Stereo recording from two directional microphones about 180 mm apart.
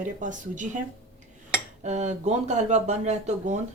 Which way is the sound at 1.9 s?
40° right (ahead or behind).